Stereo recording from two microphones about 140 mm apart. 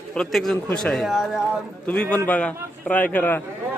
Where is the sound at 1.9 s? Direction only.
10° left (ahead or behind).